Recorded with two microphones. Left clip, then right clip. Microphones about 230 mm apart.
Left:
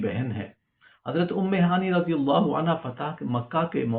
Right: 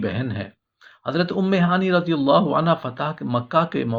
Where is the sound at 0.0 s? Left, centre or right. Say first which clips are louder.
Right 3 dB; right.